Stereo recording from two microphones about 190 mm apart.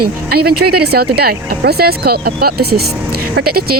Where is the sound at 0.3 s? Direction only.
55° right (ahead or behind).